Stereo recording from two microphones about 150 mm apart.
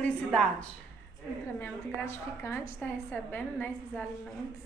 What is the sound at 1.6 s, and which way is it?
Speech, 15° left (ahead or behind).